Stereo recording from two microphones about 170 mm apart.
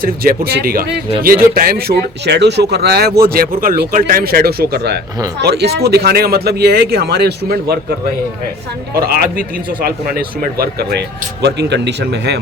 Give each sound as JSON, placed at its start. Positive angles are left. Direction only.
{"t": 0.0, "sound": "speech", "side_deg": -60}
{"t": 9.0, "sound": "speech", "side_deg": -65}
{"t": 11.4, "sound": "speech", "side_deg": -85}